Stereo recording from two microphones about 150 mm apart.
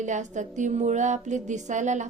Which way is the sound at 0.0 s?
55° right (ahead or behind).